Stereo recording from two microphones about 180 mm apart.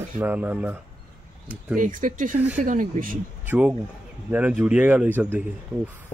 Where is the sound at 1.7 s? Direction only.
50° right (ahead or behind).